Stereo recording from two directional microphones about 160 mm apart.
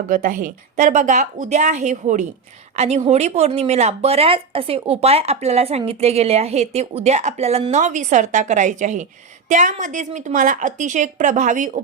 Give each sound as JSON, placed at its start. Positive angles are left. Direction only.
{"t": 0.1, "sound": "a woman's voice", "side_deg": -55}